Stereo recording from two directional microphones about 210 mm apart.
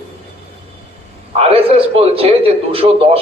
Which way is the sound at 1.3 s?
30° right (ahead or behind).